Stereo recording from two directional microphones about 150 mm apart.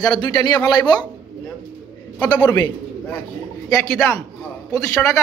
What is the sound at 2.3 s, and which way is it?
Speech, 30° left (ahead or behind).